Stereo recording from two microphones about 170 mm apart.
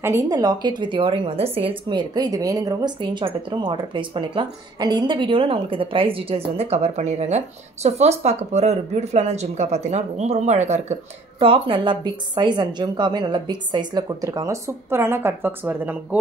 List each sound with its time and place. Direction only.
0.0 s a woman's voice: 20° right (ahead or behind)